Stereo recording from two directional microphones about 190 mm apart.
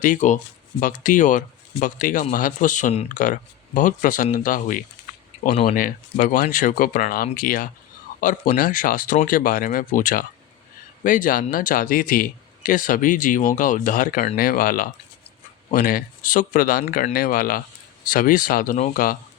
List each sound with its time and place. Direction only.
0.0 s speech: 40° left (ahead or behind)